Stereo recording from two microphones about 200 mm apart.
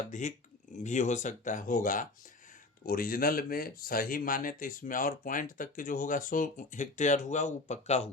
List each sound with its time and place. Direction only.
0.1 s speech: 35° left (ahead or behind)